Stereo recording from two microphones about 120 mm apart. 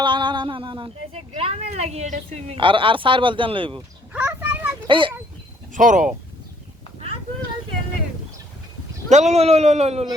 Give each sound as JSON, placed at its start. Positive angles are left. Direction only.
{"t": 0.0, "sound": "a sound", "side_deg": -40}
{"t": 1.1, "sound": "a woman's voice", "side_deg": -55}
{"t": 2.6, "sound": "a man's voice", "side_deg": -45}
{"t": 3.8, "sound": "a sound", "side_deg": -15}
{"t": 4.9, "sound": "a man's voice", "side_deg": -45}
{"t": 5.7, "sound": "speech", "side_deg": -90}
{"t": 9.0, "sound": "a woman's voice", "side_deg": -75}